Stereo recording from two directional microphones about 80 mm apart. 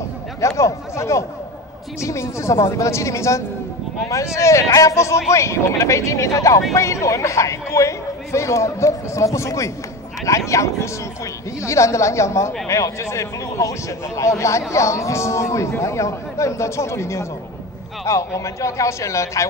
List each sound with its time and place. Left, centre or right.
0.4 s speech: left